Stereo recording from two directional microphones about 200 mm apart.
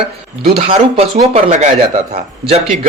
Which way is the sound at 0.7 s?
30° right (ahead or behind).